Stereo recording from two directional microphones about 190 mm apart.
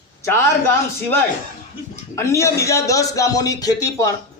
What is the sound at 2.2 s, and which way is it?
A man's voice, 15° left (ahead or behind).